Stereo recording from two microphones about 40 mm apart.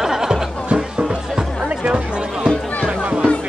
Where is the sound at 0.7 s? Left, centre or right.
Centre.